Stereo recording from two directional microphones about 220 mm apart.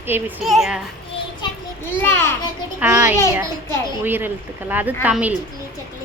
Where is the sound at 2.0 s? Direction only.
10° left (ahead or behind).